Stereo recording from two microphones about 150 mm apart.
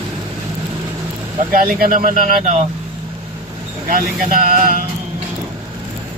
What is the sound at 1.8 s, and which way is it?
Speech, 65° right (ahead or behind).